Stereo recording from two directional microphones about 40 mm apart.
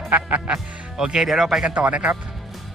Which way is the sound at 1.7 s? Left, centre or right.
Right.